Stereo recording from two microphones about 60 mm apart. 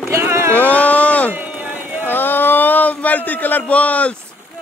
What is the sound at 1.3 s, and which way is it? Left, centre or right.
Run, right.